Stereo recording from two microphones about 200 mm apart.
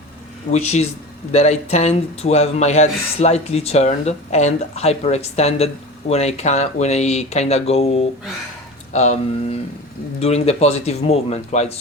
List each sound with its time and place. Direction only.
0.5 s a man's voice: 35° left (ahead or behind)